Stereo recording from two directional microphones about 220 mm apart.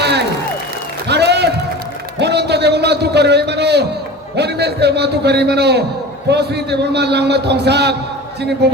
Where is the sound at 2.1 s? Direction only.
50° right (ahead or behind).